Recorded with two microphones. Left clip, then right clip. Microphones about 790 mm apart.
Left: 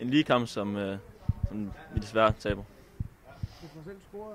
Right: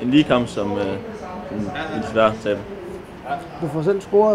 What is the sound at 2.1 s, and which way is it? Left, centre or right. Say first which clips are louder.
Speech: right 8 dB; left.